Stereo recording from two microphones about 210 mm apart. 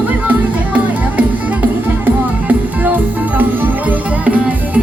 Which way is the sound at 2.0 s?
10° right (ahead or behind).